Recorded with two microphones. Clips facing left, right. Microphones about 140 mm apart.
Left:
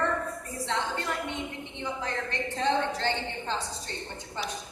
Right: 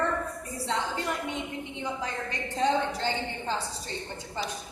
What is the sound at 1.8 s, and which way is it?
A woman's voice, 10° right (ahead or behind).